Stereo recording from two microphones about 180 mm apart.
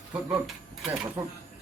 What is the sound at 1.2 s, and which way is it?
Speech, 15° right (ahead or behind).